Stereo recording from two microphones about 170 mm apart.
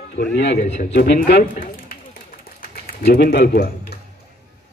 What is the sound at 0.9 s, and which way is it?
Speech, 75° left (ahead or behind).